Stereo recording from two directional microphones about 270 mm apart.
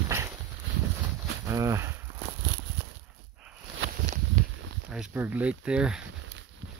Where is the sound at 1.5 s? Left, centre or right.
Centre.